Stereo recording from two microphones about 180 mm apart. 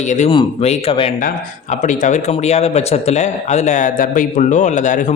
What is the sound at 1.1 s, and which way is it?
A man's voice, 45° left (ahead or behind).